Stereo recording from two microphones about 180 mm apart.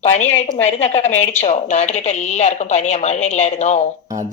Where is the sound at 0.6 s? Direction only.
40° left (ahead or behind).